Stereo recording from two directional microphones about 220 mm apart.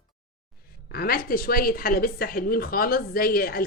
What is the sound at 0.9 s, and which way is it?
A woman's voice, 40° left (ahead or behind).